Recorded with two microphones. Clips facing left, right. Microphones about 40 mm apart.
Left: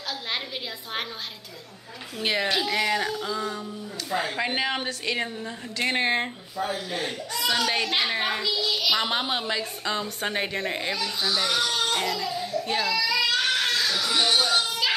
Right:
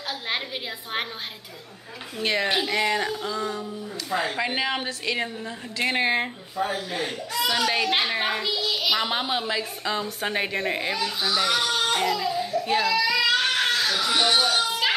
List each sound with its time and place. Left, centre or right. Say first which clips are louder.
2.1 s a child's voice: right 1 dB; centre
2.4 s a child's voice: right 1 dB; centre
6.6 s speech: right 2 dB; right
6.9 s a child's voice: right 1 dB; centre
13.1 s a sound: right 2 dB; centre
13.7 s children playing: right 2 dB; right